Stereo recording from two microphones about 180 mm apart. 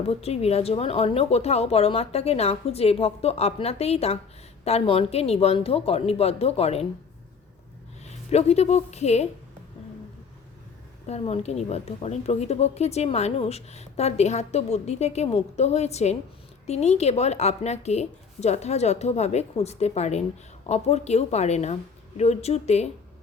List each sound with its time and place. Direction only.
0.1 s speech: 35° left (ahead or behind)
8.0 s a woman's voice: 35° left (ahead or behind)
11.0 s speech: 35° left (ahead or behind)